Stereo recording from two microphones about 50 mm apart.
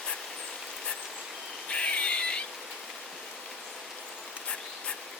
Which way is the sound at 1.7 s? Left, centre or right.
Left.